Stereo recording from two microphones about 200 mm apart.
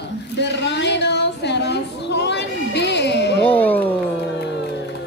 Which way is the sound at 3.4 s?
10° left (ahead or behind).